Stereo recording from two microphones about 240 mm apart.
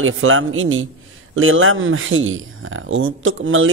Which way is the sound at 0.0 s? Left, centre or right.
Right.